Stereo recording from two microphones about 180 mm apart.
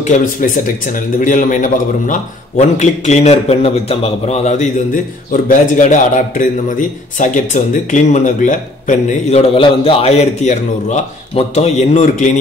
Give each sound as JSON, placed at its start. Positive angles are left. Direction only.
{"t": 0.0, "sound": "a man's voice", "side_deg": 45}
{"t": 9.6, "sound": "a man's voice", "side_deg": 30}